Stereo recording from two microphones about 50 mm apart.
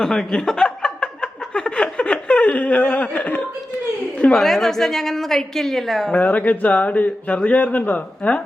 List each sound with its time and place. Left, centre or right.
0.0 s a sound: centre; by 3.4 s left
4.3 s a woman's voice: centre
6.1 s speech: left